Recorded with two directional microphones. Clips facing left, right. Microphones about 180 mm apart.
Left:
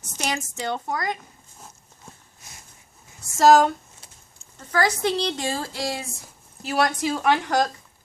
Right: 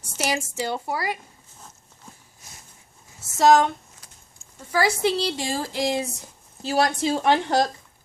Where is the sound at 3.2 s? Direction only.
Centre (ahead or behind); by 6.0 s 20° right (ahead or behind).